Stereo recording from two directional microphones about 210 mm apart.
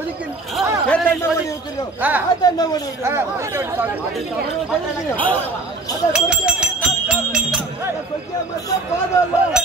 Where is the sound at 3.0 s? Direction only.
10° right (ahead or behind).